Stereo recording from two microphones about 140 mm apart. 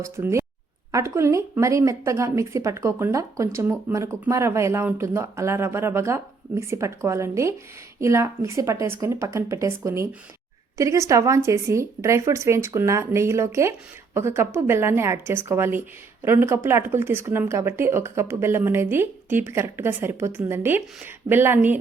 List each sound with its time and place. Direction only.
0.0 s speech: 20° right (ahead or behind)